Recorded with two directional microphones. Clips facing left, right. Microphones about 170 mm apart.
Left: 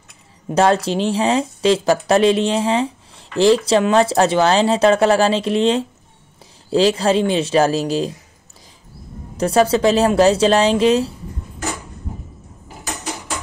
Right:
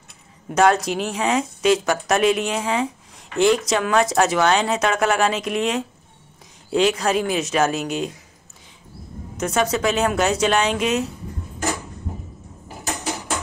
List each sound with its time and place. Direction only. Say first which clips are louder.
0.6 s speech: left 2 dB; 30° left (ahead or behind)
9.4 s speech: left 6 dB; 35° left (ahead or behind)